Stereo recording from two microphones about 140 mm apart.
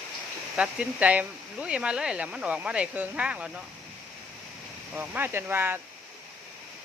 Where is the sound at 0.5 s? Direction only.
10° right (ahead or behind).